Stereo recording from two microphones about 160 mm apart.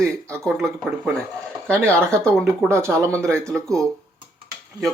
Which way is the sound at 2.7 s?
15° right (ahead or behind).